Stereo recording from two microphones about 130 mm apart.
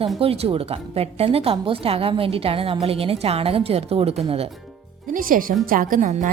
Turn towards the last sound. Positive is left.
turn(degrees=-80)